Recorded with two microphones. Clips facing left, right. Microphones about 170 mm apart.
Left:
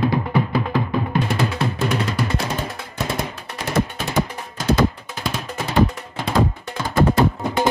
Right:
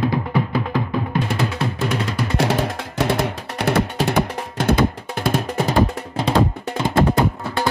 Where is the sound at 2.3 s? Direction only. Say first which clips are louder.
Right 5 dB; 85° right; by 5.7 s 55° right (ahead or behind).